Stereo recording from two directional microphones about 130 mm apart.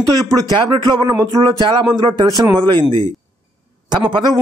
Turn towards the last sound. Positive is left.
turn(degrees=-35)  # may be behind; listen again after turning